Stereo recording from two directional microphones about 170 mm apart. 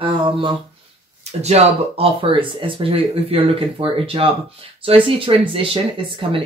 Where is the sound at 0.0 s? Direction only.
30° right (ahead or behind).